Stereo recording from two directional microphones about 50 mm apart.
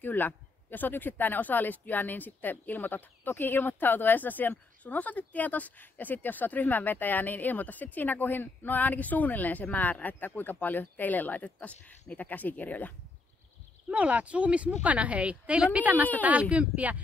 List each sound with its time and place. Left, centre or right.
0.0 s speech: left
13.8 s a woman's voice: right